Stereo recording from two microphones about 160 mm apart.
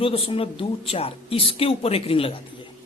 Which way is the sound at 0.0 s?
35° left (ahead or behind).